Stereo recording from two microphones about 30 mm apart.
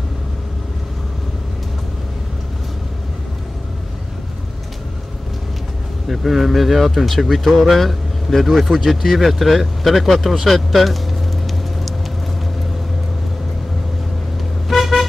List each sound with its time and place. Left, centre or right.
6.0 s speech: centre
10.4 s a sound: centre
14.7 s vehicle: centre